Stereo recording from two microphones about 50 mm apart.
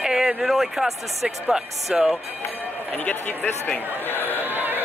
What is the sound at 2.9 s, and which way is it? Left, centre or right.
Speech, left.